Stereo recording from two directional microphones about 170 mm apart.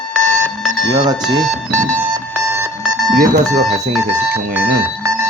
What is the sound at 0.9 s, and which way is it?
Speech, 25° right (ahead or behind).